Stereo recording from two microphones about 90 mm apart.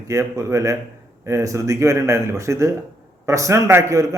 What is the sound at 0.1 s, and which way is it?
A man's voice, 35° right (ahead or behind).